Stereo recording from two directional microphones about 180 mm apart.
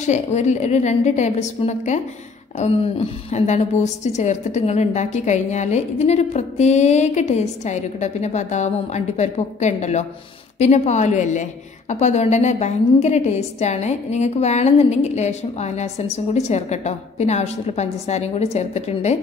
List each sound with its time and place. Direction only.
0.0 s a woman's voice: 40° left (ahead or behind)